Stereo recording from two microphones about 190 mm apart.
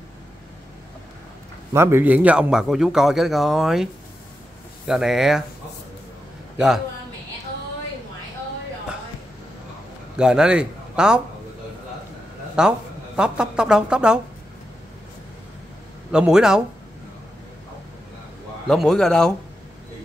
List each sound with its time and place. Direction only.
1.7 s a man's voice: 15° right (ahead or behind)
10.1 s a man's voice: 5° right (ahead or behind)
12.5 s a woman's voice: 5° right (ahead or behind)
16.1 s a man's voice: 5° right (ahead or behind)
18.7 s a man's voice: centre (ahead or behind)